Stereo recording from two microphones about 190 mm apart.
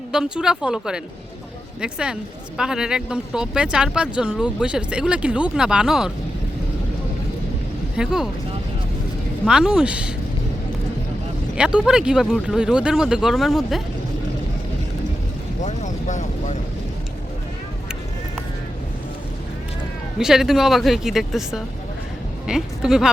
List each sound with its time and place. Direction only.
0.1 s speech: 5° right (ahead or behind)
7.9 s speech: 5° right (ahead or behind)
9.5 s speech: 5° right (ahead or behind)
11.5 s speech: 5° right (ahead or behind)
15.6 s vehicle: 40° left (ahead or behind)
20.1 s speech: centre (ahead or behind)